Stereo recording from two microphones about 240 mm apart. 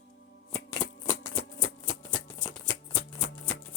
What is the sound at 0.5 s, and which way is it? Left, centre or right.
Shuffling cards, centre.